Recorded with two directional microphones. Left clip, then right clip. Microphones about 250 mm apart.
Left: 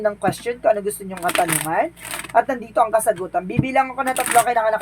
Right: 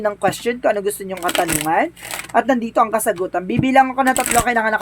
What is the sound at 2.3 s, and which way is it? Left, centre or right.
Speech, right.